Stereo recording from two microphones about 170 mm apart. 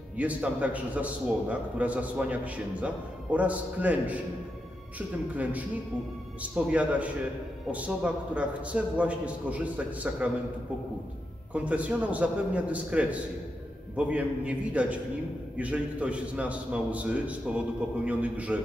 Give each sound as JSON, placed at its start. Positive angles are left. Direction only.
{"t": 0.2, "sound": "a man's voice", "side_deg": -10}
{"t": 11.5, "sound": "a man's voice", "side_deg": -10}